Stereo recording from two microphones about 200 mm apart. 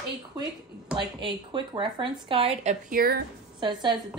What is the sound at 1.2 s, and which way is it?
A woman's voice, 25° right (ahead or behind).